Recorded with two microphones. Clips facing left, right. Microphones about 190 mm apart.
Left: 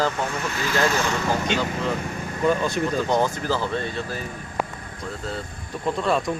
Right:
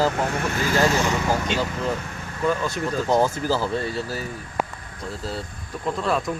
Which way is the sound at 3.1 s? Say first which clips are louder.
Right 2 dB; 5° right (ahead or behind).